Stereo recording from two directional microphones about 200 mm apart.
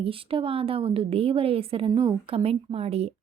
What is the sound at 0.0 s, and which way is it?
Speech, 25° right (ahead or behind).